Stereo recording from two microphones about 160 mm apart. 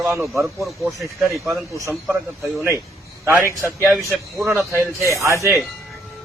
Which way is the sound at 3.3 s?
15° right (ahead or behind).